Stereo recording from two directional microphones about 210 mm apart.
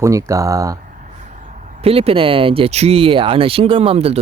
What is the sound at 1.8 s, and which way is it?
Speech, 30° right (ahead or behind).